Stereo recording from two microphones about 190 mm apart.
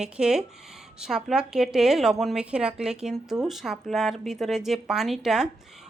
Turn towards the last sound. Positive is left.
turn(degrees=0)  # may be behind; listen again after turning